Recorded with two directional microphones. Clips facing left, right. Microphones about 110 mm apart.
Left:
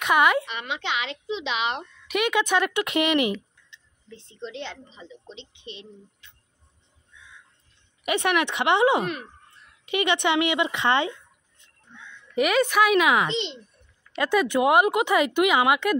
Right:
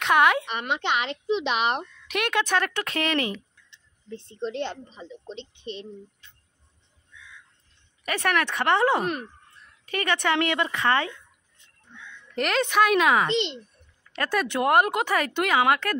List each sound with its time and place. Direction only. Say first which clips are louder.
0.0 s a woman's voice: even; 5° left (ahead or behind)
0.5 s a woman's voice: right 3 dB; 50° right (ahead or behind)
2.0 s speech: left 3 dB; 5° left (ahead or behind)
4.1 s a woman's voice: right 6 dB; 45° right (ahead or behind)
8.0 s speech: left 2 dB; 15° left (ahead or behind)
9.0 s a woman's voice: right 2 dB; 45° right (ahead or behind)
9.8 s speech: left 2 dB; 20° left (ahead or behind)
12.4 s speech: left 2 dB; 5° left (ahead or behind)
13.3 s a child's voice: right 3 dB; 60° right (ahead or behind)
14.1 s speech: left 4 dB; 15° left (ahead or behind)